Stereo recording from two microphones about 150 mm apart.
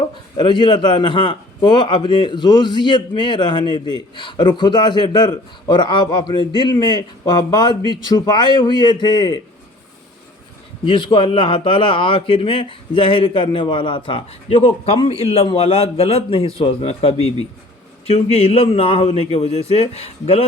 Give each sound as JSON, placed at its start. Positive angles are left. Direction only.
{"t": 0.0, "sound": "a man's voice", "side_deg": 30}
{"t": 10.8, "sound": "a man's voice", "side_deg": 30}